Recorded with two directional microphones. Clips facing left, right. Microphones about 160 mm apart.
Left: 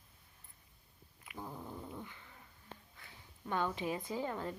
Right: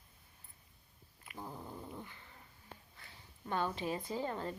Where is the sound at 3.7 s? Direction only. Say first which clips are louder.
Even; 15° left (ahead or behind).